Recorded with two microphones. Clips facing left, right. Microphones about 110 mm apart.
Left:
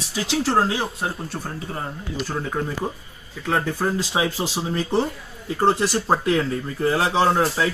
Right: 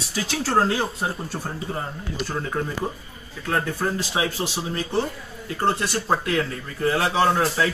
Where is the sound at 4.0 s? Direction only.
25° left (ahead or behind); by 7.7 s 10° left (ahead or behind).